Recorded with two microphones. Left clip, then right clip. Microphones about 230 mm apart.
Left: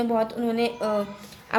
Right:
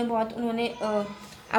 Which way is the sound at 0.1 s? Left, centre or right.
Left.